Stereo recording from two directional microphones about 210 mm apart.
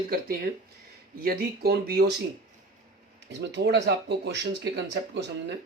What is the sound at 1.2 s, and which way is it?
Speech, 45° right (ahead or behind).